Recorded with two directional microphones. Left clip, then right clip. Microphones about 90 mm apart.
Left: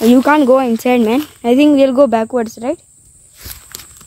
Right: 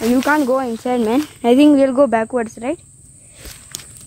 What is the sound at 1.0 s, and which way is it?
Speech, 25° left (ahead or behind).